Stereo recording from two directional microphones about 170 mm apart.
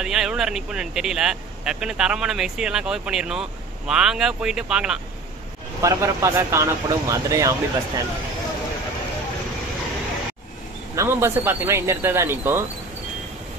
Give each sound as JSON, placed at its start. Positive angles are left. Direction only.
{"t": 0.0, "sound": "speech", "side_deg": -5}
{"t": 5.8, "sound": "speech", "side_deg": -20}
{"t": 11.0, "sound": "speech", "side_deg": -15}